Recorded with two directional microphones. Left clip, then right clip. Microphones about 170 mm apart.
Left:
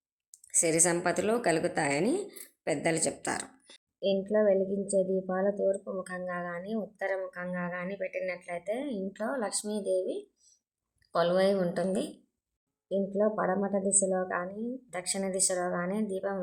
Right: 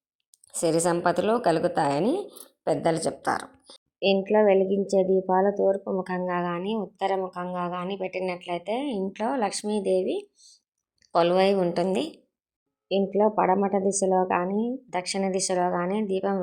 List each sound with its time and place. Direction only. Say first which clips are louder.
0.3 s a sound: right 4 dB; 15° right (ahead or behind)
1.0 s a woman's voice: right 5 dB; 15° right (ahead or behind)
4.0 s a woman's voice: right 6 dB; 35° right (ahead or behind)